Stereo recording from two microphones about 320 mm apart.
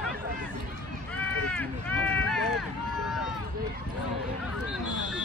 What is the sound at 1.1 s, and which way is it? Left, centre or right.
Speech, centre.